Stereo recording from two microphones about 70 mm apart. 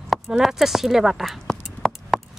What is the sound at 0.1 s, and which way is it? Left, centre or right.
Speech, centre.